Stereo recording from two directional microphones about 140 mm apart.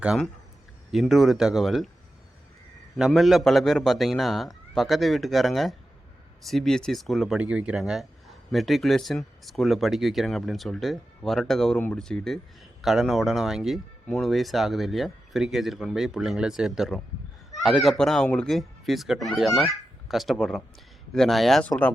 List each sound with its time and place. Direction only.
0.9 s speech: centre (ahead or behind)
2.9 s a child's voice: centre (ahead or behind)